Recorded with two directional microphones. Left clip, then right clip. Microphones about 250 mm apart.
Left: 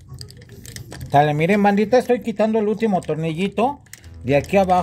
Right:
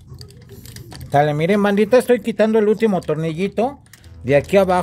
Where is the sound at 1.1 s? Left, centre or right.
Centre.